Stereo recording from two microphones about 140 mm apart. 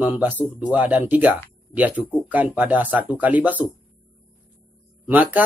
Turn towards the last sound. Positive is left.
turn(degrees=-10)  # may be behind; listen again after turning